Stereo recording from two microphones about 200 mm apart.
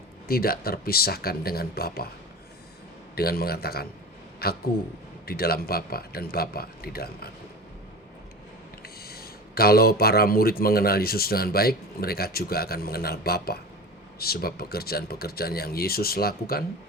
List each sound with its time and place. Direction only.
0.3 s speech: 50° left (ahead or behind)
3.2 s speech: 50° left (ahead or behind)
8.8 s speech: 50° left (ahead or behind)